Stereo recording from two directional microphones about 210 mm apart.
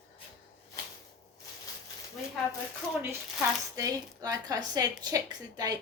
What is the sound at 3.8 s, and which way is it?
A woman's voice, 15° right (ahead or behind).